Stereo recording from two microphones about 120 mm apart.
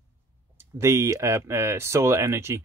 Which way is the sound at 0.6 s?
20° right (ahead or behind).